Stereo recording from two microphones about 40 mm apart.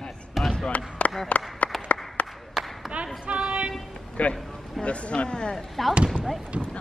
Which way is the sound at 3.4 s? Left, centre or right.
Centre.